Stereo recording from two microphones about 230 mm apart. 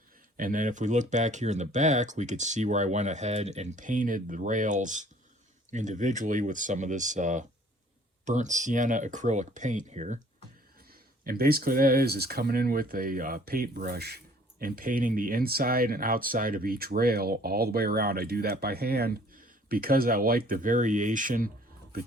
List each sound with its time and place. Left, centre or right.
0.3 s speech: right
11.2 s speech: right